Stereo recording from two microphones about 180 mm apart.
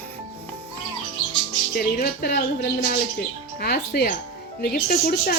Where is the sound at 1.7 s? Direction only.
55° left (ahead or behind).